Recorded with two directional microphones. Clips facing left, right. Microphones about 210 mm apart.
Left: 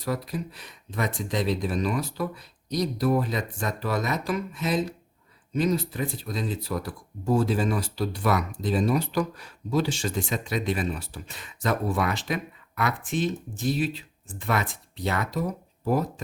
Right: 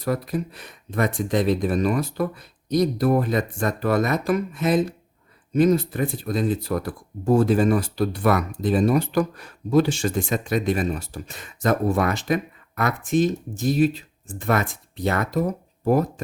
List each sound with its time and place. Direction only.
0.0 s speech: 50° right (ahead or behind)